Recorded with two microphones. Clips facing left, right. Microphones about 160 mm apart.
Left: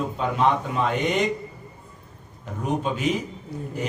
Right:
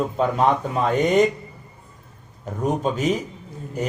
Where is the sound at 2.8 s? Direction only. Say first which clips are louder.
Right 3 dB; 40° right (ahead or behind).